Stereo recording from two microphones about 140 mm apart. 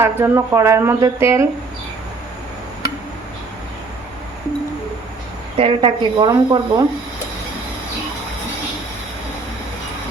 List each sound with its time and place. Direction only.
0.0 s speech: 20° right (ahead or behind)
5.5 s speech: 40° right (ahead or behind)